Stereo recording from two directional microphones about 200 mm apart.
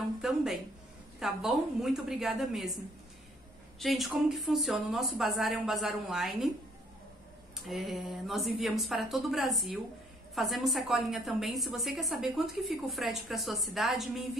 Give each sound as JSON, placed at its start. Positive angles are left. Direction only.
{"t": 0.2, "sound": "a sound", "side_deg": 0}
{"t": 1.2, "sound": "a woman's voice", "side_deg": 0}
{"t": 3.8, "sound": "a woman's voice", "side_deg": 0}
{"t": 7.5, "sound": "a woman's voice", "side_deg": 0}